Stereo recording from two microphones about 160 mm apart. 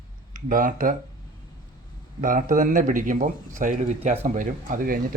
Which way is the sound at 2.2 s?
60° right (ahead or behind).